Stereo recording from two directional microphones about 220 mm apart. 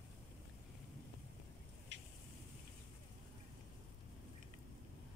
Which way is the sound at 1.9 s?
55° right (ahead or behind).